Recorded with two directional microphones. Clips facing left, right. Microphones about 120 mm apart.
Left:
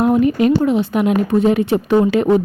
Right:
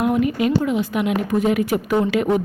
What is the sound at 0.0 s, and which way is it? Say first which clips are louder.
A woman's voice: left 5 dB; 35° left (ahead or behind).